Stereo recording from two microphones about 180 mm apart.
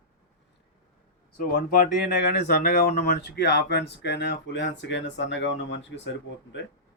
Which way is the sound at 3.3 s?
65° left (ahead or behind).